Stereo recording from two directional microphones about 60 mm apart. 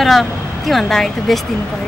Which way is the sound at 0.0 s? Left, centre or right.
Centre.